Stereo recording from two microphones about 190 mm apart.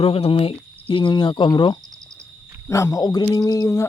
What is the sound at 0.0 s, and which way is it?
Speech, 30° left (ahead or behind).